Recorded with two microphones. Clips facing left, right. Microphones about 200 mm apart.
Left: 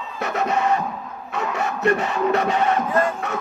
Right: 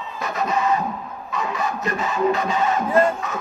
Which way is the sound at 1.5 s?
70° left (ahead or behind).